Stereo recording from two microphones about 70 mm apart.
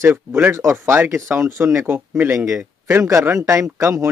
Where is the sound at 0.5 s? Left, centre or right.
Right.